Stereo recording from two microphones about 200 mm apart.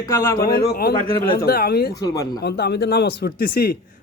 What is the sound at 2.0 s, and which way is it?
Speech, 20° left (ahead or behind).